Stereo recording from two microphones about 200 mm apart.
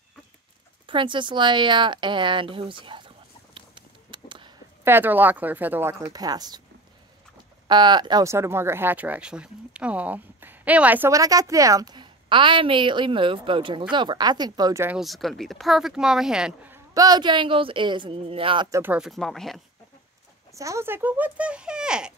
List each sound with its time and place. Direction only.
0.8 s speech: 25° right (ahead or behind)
3.5 s a sound: 25° right (ahead or behind)
4.8 s speech: 10° right (ahead or behind)
7.6 s speech: 20° right (ahead or behind)
15.0 s speech: centre (ahead or behind); by 18.8 s 25° right (ahead or behind)
18.8 s speech: 5° right (ahead or behind)
20.5 s speech: 15° right (ahead or behind)